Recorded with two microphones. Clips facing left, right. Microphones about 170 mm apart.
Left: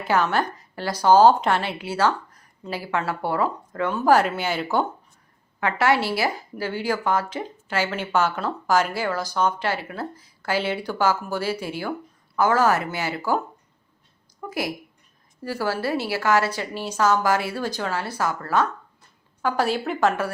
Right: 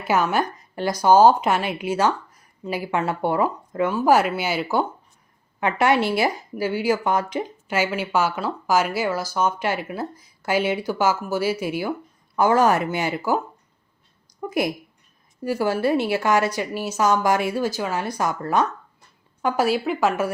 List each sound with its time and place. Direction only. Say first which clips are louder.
0.1 s a woman's voice: right 1 dB; 15° right (ahead or behind)
5.5 s a woman's voice: right 2 dB; 20° right (ahead or behind)
14.4 s a woman's voice: right 5 dB; 20° right (ahead or behind); by 20.2 s centre (ahead or behind)